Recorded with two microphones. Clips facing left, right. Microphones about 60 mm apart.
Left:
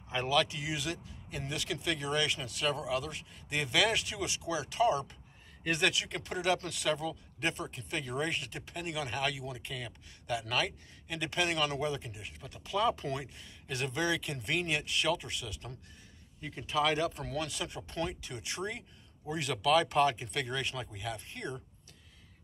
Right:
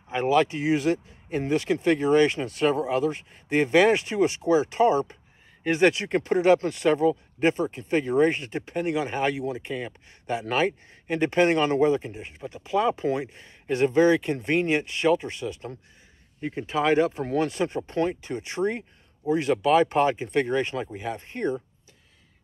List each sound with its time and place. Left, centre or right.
0.1 s speech: right